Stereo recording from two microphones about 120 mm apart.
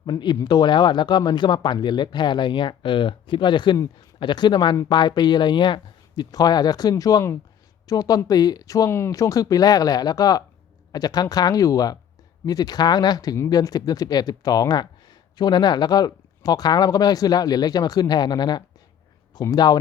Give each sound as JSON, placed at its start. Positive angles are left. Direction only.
{"t": 0.0, "sound": "speech", "side_deg": 40}